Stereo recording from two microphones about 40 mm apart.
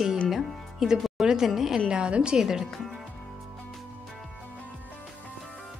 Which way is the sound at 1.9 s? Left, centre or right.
Right.